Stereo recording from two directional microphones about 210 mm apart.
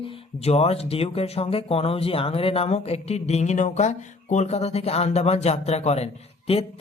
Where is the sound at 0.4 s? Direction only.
30° left (ahead or behind).